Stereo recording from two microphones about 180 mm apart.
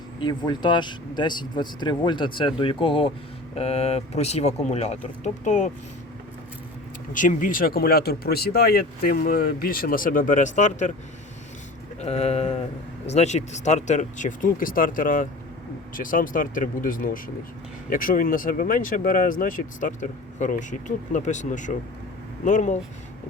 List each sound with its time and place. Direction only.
0.2 s speech: 25° left (ahead or behind); by 5.7 s 40° left (ahead or behind)
7.1 s speech: 45° left (ahead or behind)
11.9 s a sound: 35° left (ahead or behind)
13.1 s speech: 35° left (ahead or behind)